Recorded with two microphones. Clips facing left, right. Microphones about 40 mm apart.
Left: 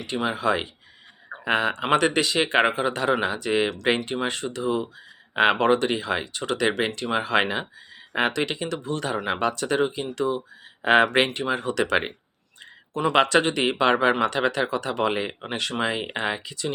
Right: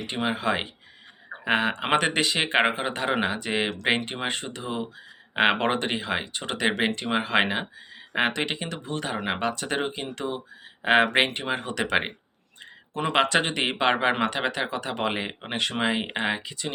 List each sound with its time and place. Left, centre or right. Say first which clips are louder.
0.0 s speech: left 2 dB; right
10.8 s speech: left 2 dB; centre